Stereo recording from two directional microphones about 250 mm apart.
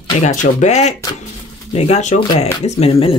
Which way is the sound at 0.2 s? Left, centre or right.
Left.